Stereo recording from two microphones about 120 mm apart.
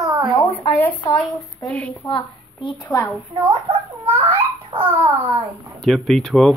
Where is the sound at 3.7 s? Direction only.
45° right (ahead or behind).